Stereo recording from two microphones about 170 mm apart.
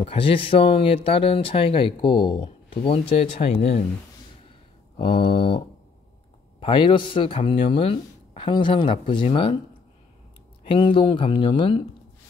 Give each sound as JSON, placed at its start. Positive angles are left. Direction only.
{"t": 0.0, "sound": "speech", "side_deg": 30}
{"t": 4.9, "sound": "speech", "side_deg": 30}
{"t": 10.6, "sound": "speech", "side_deg": 30}